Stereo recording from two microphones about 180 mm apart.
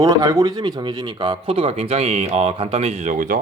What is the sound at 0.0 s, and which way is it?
Speech, 20° right (ahead or behind).